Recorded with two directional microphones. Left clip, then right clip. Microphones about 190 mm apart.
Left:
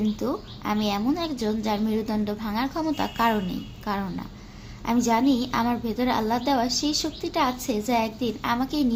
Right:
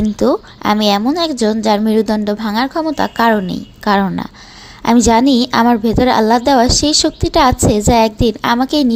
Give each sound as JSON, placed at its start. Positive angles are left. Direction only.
{"t": 0.0, "sound": "a woman's voice", "side_deg": -45}